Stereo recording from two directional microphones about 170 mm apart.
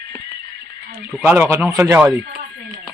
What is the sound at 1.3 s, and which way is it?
Speech, 10° right (ahead or behind).